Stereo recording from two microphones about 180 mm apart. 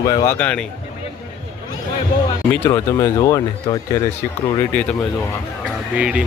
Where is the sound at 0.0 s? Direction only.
20° left (ahead or behind).